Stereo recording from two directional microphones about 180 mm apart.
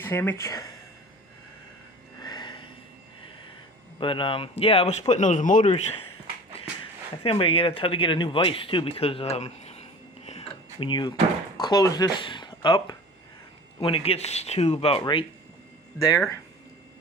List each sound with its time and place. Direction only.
0.0 s speech: 10° left (ahead or behind)
2.2 s vehicle: 25° left (ahead or behind)
4.0 s speech: 30° left (ahead or behind)
7.2 s speech: 30° left (ahead or behind)
10.2 s a sound: 35° left (ahead or behind)
11.6 s speech: 20° left (ahead or behind)